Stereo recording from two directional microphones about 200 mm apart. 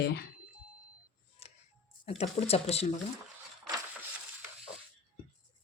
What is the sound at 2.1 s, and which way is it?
Speech, 30° left (ahead or behind).